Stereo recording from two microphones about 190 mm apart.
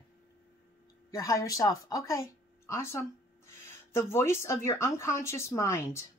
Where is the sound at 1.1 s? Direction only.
15° left (ahead or behind).